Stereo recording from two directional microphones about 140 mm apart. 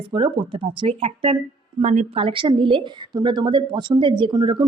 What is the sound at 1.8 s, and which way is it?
Speech, 50° right (ahead or behind).